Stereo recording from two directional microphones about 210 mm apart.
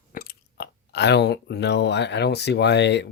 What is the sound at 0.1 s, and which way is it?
Speech, 45° left (ahead or behind).